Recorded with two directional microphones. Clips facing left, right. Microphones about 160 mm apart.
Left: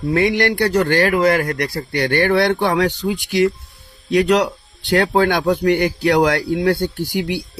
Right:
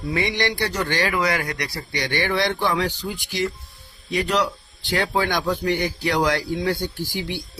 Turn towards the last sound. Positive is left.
turn(degrees=60)  # may be behind; listen again after turning